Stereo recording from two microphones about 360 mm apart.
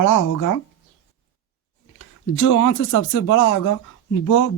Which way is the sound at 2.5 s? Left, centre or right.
Left.